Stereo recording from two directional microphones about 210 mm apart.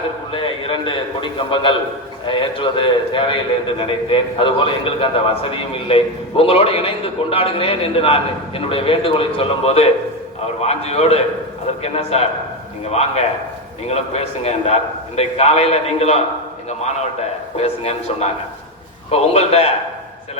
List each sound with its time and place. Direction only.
0.3 s a man's voice: 25° left (ahead or behind)
19.3 s a man's voice: 30° left (ahead or behind)